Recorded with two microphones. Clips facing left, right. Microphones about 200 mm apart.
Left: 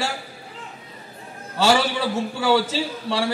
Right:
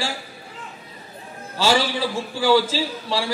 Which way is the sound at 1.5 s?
65° left (ahead or behind).